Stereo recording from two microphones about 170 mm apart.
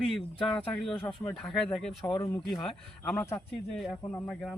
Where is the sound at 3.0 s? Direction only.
10° left (ahead or behind).